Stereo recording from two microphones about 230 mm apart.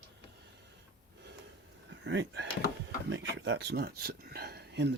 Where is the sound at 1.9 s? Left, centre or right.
Right.